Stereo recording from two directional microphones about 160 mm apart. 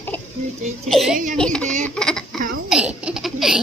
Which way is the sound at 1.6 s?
50° right (ahead or behind).